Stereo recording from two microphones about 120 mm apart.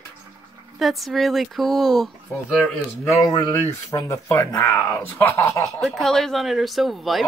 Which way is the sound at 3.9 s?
25° left (ahead or behind).